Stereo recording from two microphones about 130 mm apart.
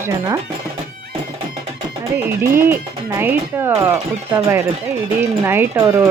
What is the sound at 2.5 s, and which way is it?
Speech, 15° right (ahead or behind).